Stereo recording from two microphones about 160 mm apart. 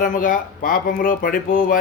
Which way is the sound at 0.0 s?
60° left (ahead or behind).